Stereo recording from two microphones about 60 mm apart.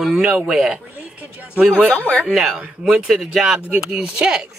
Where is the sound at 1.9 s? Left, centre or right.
Left.